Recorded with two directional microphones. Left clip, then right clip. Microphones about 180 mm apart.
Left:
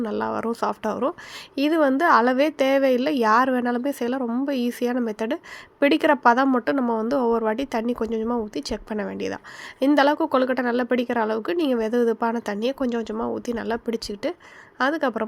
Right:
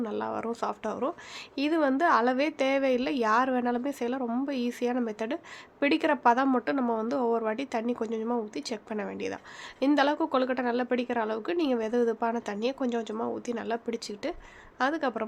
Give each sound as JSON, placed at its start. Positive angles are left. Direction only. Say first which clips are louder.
{"t": 0.0, "sound": "a woman's voice", "louder": "left 6 dB", "side_deg": 30}